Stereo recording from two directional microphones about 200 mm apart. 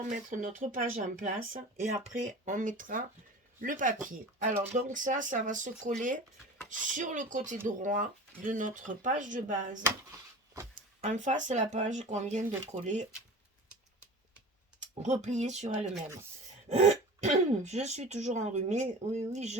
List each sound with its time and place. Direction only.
0.0 s speech: 40° right (ahead or behind)
9.8 s a sound: 15° right (ahead or behind)
11.0 s speech: 35° right (ahead or behind)
14.8 s speech: 35° right (ahead or behind)